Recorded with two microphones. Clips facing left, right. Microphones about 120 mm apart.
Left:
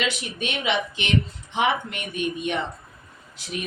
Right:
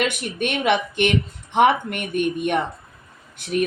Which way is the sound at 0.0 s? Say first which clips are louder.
Right 4 dB; 55° right (ahead or behind).